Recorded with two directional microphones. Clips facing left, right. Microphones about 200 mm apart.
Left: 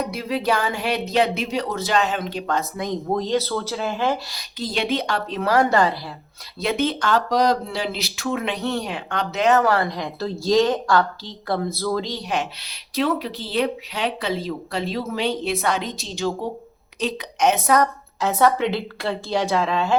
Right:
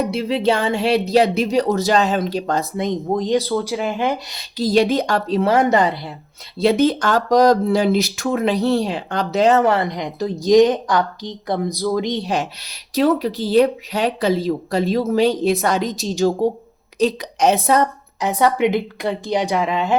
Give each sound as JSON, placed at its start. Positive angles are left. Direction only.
{"t": 0.1, "sound": "speech", "side_deg": -25}
{"t": 2.8, "sound": "a woman's voice", "side_deg": -20}
{"t": 4.5, "sound": "speech", "side_deg": -40}
{"t": 5.4, "sound": "a woman's voice", "side_deg": -25}
{"t": 6.6, "sound": "speech", "side_deg": -35}
{"t": 12.2, "sound": "a woman's voice", "side_deg": -40}
{"t": 18.3, "sound": "a woman's voice", "side_deg": -15}